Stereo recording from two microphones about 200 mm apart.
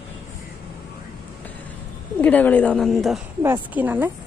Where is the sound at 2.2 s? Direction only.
10° left (ahead or behind).